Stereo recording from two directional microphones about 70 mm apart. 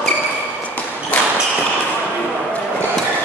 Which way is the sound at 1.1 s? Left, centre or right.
Centre.